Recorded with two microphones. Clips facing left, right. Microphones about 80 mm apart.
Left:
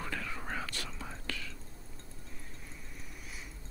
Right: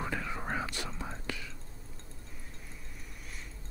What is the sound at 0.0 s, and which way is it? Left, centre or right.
Whispering, centre.